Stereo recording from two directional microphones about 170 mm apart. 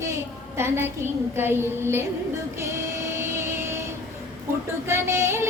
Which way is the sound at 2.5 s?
15° right (ahead or behind).